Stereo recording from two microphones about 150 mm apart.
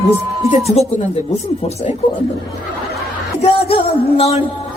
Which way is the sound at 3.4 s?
40° left (ahead or behind).